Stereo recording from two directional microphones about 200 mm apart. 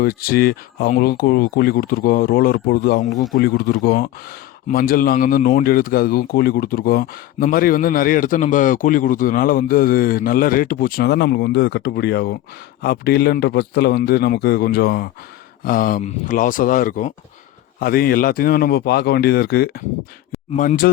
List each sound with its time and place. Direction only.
0.0 s speech: 50° left (ahead or behind)